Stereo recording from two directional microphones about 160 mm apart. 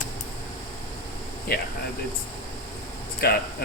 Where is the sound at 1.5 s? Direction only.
70° left (ahead or behind).